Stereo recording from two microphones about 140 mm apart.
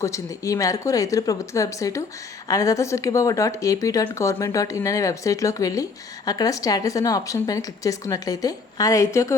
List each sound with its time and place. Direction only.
0.0 s speech: 20° left (ahead or behind)